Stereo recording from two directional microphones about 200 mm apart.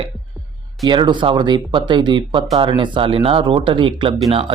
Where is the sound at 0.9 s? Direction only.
25° right (ahead or behind).